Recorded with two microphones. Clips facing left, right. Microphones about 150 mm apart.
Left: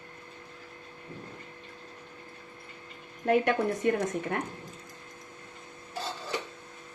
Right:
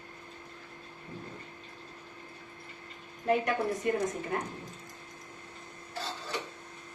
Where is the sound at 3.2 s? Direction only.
65° left (ahead or behind).